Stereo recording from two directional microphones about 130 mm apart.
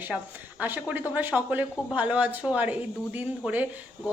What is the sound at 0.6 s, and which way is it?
Speech, 15° right (ahead or behind).